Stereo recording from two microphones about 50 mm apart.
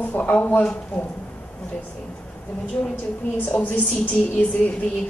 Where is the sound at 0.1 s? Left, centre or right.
Left.